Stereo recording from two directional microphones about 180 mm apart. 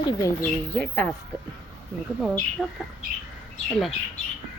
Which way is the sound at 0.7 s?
5° left (ahead or behind).